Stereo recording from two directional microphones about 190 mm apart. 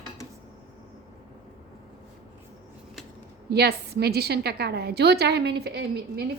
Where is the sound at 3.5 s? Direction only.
60° right (ahead or behind).